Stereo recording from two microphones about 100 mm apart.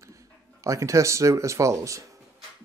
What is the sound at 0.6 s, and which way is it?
Speech, 30° right (ahead or behind).